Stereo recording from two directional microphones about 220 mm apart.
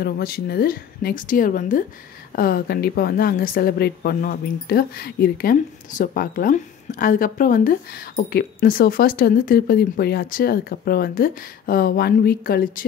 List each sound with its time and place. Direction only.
0.0 s a woman's voice: 45° left (ahead or behind)